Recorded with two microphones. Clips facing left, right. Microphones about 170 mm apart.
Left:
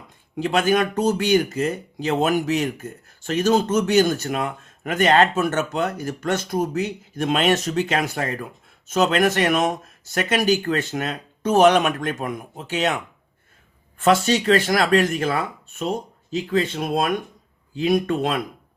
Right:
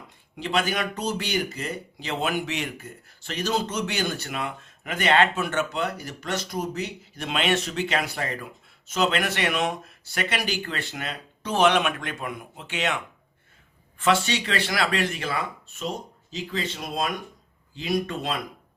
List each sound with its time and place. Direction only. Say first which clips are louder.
0.3 s speech: left 7 dB; 45° left (ahead or behind)
14.0 s speech: left 5 dB; 40° left (ahead or behind)